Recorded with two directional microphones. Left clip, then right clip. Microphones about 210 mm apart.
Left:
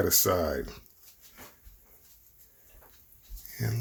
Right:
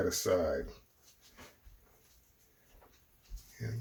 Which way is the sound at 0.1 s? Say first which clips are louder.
Left 4 dB; 55° left (ahead or behind).